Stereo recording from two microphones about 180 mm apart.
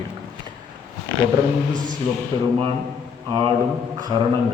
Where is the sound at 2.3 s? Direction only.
25° right (ahead or behind).